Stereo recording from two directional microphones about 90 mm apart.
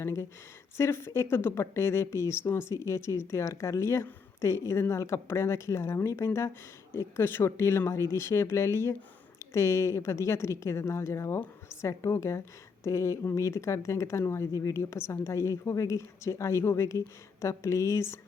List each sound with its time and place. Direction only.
0.0 s speech: 30° left (ahead or behind)